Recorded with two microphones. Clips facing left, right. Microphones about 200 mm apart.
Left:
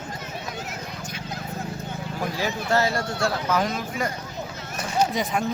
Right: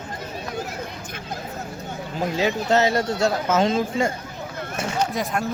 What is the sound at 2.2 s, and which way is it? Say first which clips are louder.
Speech: right 6 dB; 20° right (ahead or behind).